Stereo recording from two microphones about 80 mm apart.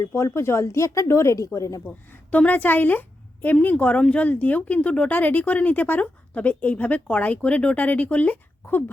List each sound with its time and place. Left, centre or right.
0.0 s speech: left
2.3 s speech: centre